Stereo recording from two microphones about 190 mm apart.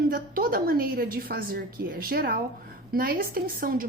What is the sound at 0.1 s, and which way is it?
A woman's voice, 50° right (ahead or behind).